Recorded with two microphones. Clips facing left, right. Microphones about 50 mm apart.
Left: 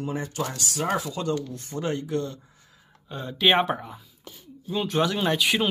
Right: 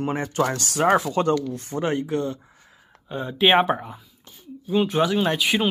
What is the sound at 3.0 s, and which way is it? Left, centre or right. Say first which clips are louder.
Speech: right 3 dB; centre.